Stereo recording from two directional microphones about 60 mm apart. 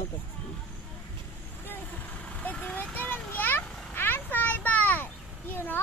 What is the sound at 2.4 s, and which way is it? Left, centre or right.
Vehicle, left.